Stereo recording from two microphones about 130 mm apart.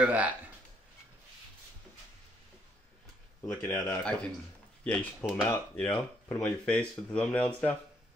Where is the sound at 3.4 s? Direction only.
20° left (ahead or behind).